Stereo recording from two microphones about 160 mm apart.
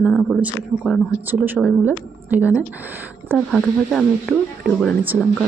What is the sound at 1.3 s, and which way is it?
A man's voice, 10° right (ahead or behind).